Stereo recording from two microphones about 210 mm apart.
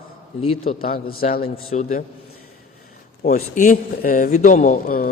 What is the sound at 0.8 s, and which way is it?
Speech, 45° left (ahead or behind).